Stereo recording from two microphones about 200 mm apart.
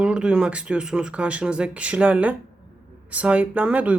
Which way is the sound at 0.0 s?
5° right (ahead or behind).